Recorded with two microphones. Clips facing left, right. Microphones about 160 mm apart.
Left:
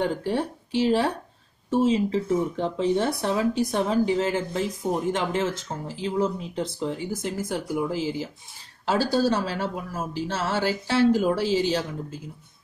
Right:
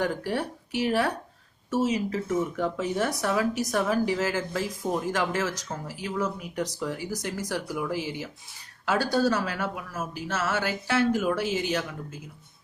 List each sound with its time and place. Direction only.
0.0 s speech: 25° left (ahead or behind)